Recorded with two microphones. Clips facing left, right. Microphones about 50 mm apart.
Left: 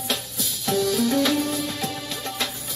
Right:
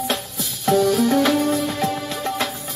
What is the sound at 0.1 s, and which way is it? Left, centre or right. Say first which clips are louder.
Music: right 3 dB; right.